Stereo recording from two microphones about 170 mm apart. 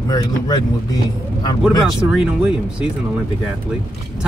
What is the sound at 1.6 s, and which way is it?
Speech, centre (ahead or behind).